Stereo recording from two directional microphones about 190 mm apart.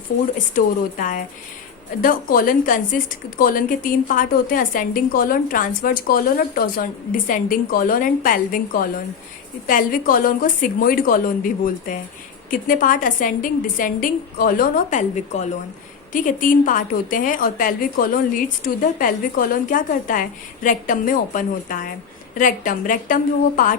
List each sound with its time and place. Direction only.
0.3 s a woman's voice: 45° left (ahead or behind)